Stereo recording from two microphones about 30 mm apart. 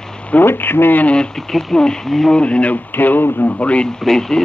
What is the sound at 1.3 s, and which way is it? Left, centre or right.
Speech, centre.